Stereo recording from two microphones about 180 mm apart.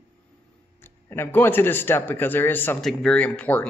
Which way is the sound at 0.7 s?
10° left (ahead or behind).